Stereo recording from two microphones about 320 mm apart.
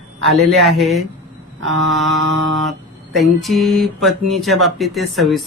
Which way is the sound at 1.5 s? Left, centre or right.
Right.